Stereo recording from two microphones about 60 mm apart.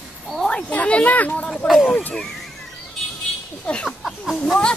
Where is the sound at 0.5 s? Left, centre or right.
Centre.